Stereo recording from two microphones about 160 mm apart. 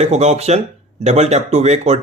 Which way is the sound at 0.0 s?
45° right (ahead or behind).